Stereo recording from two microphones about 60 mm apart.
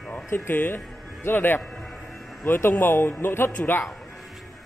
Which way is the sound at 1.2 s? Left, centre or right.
Left.